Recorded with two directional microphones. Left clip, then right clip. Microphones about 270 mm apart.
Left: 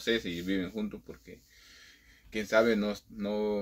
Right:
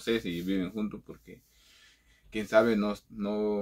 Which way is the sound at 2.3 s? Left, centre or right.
Centre.